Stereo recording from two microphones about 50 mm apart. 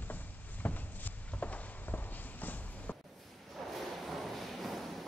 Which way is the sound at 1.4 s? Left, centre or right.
Left.